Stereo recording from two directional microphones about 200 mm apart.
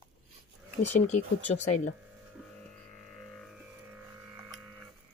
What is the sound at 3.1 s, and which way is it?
Music, 5° left (ahead or behind).